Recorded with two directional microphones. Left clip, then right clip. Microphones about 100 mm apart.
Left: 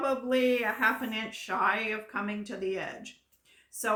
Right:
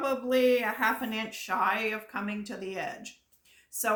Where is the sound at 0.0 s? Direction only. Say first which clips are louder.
Right 1 dB; 30° right (ahead or behind).